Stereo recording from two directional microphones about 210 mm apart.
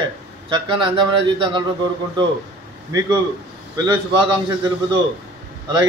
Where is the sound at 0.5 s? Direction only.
20° right (ahead or behind).